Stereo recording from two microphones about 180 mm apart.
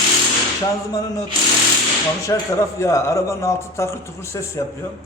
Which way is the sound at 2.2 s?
15° left (ahead or behind).